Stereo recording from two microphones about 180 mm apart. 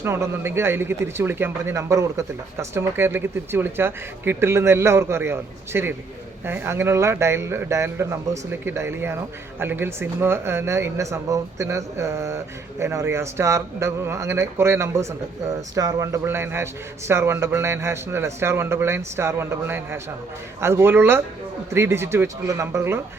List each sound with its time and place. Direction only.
0.0 s a man's voice: 15° right (ahead or behind)